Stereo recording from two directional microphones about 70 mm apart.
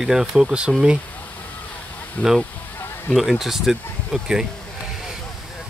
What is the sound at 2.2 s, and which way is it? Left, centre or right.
Speech, left.